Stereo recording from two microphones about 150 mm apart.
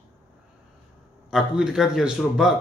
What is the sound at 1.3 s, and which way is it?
Speech, 5° right (ahead or behind).